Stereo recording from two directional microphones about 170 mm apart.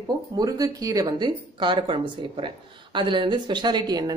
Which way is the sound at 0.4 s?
20° right (ahead or behind).